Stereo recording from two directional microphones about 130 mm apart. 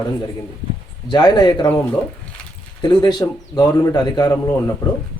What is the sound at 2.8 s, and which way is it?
A man's voice, 30° left (ahead or behind).